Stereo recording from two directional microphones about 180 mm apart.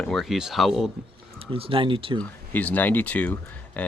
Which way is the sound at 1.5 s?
30° right (ahead or behind).